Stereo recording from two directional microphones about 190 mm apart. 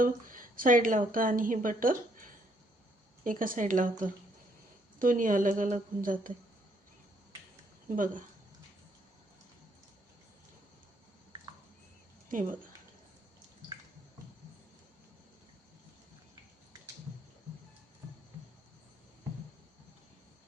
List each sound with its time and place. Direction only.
0.0 s a woman's voice: 45° right (ahead or behind)
7.9 s a woman's voice: 45° right (ahead or behind)
12.3 s a woman's voice: 45° right (ahead or behind)